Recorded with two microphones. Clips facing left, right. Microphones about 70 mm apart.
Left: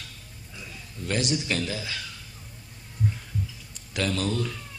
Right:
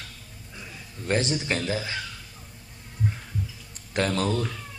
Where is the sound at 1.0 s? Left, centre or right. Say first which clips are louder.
Right 2 dB; right.